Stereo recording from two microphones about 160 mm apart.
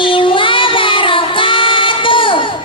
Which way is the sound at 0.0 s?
30° left (ahead or behind).